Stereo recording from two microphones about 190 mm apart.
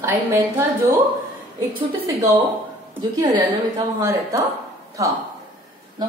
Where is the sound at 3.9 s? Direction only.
15° right (ahead or behind).